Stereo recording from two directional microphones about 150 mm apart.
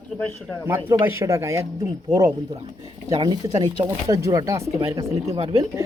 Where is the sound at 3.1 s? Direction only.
30° right (ahead or behind).